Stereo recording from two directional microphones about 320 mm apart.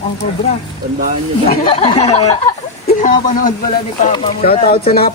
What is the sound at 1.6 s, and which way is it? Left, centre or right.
Speech, centre.